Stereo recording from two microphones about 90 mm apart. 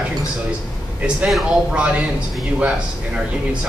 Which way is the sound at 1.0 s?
10° right (ahead or behind).